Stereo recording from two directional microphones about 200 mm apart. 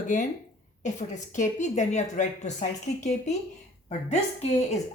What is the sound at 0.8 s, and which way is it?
Speech, 35° left (ahead or behind).